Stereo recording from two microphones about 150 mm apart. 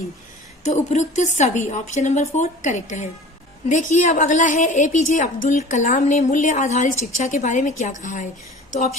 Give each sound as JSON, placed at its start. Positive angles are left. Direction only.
{"t": 0.6, "sound": "a woman's voice", "side_deg": 50}